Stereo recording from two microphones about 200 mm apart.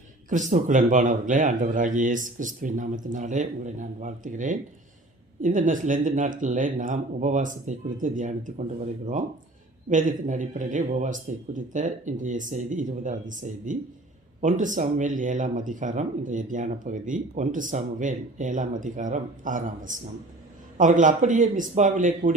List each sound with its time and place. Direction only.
0.3 s speech: 40° right (ahead or behind)
9.9 s speech: 40° right (ahead or behind)